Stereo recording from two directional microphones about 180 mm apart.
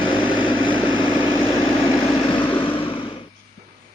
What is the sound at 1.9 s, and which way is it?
Vehicle, centre (ahead or behind).